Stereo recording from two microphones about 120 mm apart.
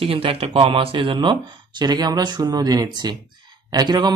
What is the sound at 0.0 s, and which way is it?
Speech, 50° right (ahead or behind).